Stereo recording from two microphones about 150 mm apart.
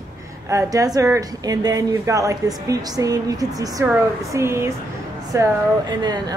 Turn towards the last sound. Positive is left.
turn(degrees=-30)  # may be behind; listen again after turning